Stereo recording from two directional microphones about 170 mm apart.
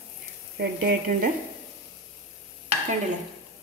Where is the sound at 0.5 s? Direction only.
60° right (ahead or behind).